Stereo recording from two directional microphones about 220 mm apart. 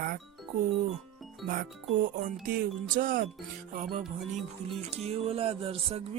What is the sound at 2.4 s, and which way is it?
Speech, 40° right (ahead or behind).